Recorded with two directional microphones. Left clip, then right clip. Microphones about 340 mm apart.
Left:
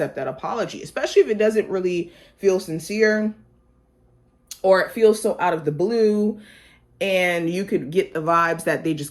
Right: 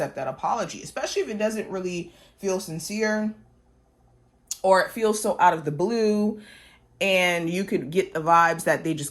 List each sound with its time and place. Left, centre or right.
0.0 s speech: centre
4.4 s speech: centre
5.2 s speech: right